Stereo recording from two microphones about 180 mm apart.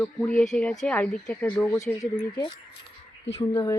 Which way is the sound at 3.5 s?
15° left (ahead or behind).